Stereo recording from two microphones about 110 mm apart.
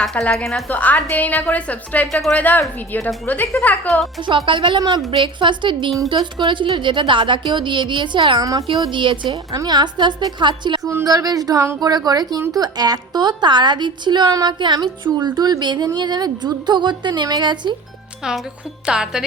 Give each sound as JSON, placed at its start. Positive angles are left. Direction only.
{"t": 0.0, "sound": "a woman's voice", "side_deg": 5}
{"t": 4.2, "sound": "a woman's voice", "side_deg": -50}
{"t": 4.8, "sound": "a woman's voice", "side_deg": -35}
{"t": 5.1, "sound": "a woman's voice", "side_deg": -50}
{"t": 10.8, "sound": "a woman's voice", "side_deg": -30}
{"t": 11.8, "sound": "a woman's voice", "side_deg": -35}
{"t": 18.2, "sound": "a woman's voice", "side_deg": -5}